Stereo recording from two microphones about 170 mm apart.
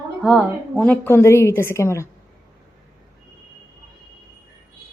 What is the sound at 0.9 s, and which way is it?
Speech, 10° left (ahead or behind).